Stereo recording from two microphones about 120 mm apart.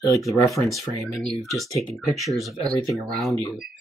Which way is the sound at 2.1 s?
Centre (ahead or behind).